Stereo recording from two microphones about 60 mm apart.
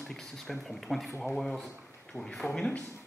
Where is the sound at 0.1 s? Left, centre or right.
Centre.